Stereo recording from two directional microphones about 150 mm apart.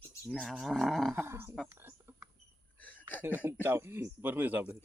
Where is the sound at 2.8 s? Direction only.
10° left (ahead or behind).